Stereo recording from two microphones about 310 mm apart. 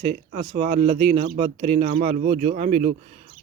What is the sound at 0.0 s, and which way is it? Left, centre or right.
A man's voice, right.